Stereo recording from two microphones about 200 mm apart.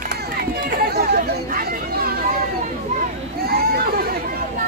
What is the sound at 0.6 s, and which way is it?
Chatter, 50° right (ahead or behind).